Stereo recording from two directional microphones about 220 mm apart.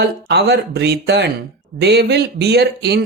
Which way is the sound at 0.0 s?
50° right (ahead or behind).